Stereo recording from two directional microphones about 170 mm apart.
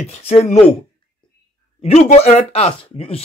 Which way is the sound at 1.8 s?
35° left (ahead or behind).